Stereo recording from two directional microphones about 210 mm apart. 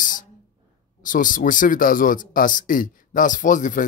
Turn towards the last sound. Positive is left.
turn(degrees=40)  # may be behind; listen again after turning